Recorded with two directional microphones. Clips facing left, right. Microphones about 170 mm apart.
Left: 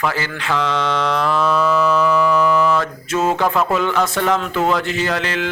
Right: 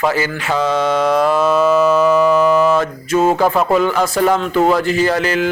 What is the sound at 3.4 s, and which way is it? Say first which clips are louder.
Mantra: right 4 dB; 30° right (ahead or behind).